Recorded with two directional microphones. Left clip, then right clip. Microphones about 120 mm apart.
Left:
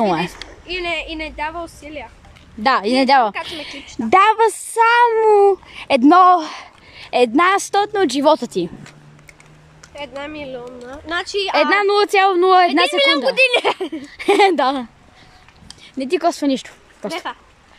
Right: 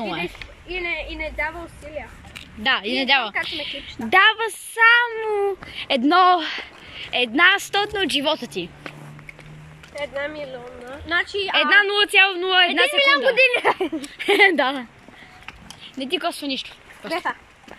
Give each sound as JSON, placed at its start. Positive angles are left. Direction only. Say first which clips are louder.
{"t": 0.7, "sound": "speech", "louder": "left 4 dB", "side_deg": 20}
{"t": 2.6, "sound": "speech", "louder": "left 6 dB", "side_deg": 40}
{"t": 4.1, "sound": "a woman's voice", "louder": "left 4 dB", "side_deg": 30}
{"t": 5.8, "sound": "a woman's voice", "louder": "left 5 dB", "side_deg": 20}
{"t": 7.3, "sound": "speech", "louder": "left 2 dB", "side_deg": 35}
{"t": 9.9, "sound": "a woman's voice", "louder": "right 1 dB", "side_deg": 10}
{"t": 11.5, "sound": "a woman's voice", "louder": "left 2 dB", "side_deg": 40}
{"t": 12.6, "sound": "speech", "louder": "left 3 dB", "side_deg": 15}
{"t": 12.9, "sound": "a woman's voice", "louder": "left 1 dB", "side_deg": 30}
{"t": 13.7, "sound": "speech", "louder": "even", "side_deg": 0}
{"t": 14.2, "sound": "a woman's voice", "louder": "left 3 dB", "side_deg": 25}
{"t": 16.0, "sound": "a woman's voice", "louder": "left 7 dB", "side_deg": 45}
{"t": 16.4, "sound": "speech", "louder": "left 7 dB", "side_deg": 75}
{"t": 17.1, "sound": "speech", "louder": "right 3 dB", "side_deg": 5}